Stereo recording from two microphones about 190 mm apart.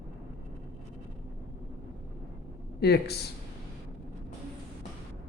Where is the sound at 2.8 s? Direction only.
60° left (ahead or behind).